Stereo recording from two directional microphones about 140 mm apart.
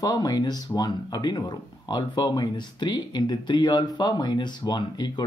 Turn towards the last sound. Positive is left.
turn(degrees=30)  # may be behind; listen again after turning